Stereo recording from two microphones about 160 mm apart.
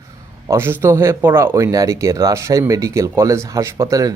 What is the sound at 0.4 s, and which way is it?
Speech, 15° right (ahead or behind).